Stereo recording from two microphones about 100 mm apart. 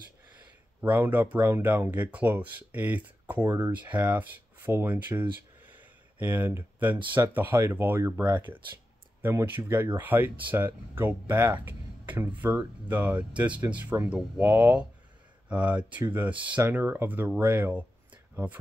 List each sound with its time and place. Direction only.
0.7 s speech: 20° right (ahead or behind)
11.6 s a sound: 20° right (ahead or behind)
12.8 s speech: 15° right (ahead or behind)